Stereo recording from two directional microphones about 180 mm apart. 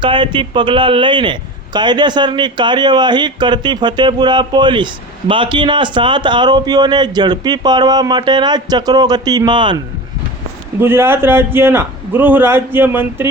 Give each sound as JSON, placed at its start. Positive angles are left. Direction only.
{"t": 0.0, "sound": "a man's voice", "side_deg": -25}
{"t": 10.8, "sound": "a man's voice", "side_deg": -15}